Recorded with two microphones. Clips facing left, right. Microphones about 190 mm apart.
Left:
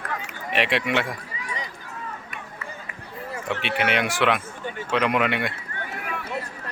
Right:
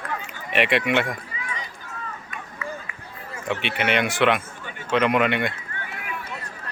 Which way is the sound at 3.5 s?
Centre (ahead or behind).